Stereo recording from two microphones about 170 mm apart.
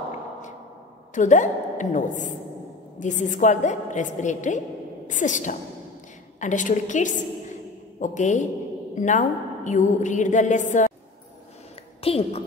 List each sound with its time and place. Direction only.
1.1 s a woman's voice: 45° left (ahead or behind)
12.0 s a woman's voice: 35° left (ahead or behind)